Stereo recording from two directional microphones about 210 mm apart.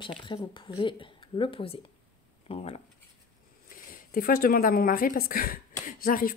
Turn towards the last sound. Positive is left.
turn(degrees=40)  # may be behind; listen again after turning